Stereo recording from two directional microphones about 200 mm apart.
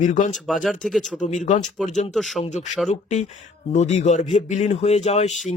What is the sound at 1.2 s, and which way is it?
Speech, 40° left (ahead or behind).